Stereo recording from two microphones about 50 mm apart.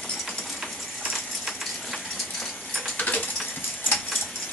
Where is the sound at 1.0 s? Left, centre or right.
Centre.